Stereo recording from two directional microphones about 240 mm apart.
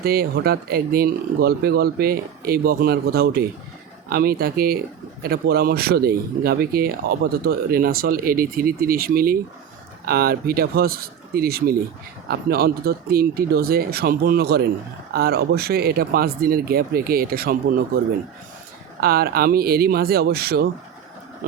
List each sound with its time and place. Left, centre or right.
0.0 s speech: right
18.9 s speech: right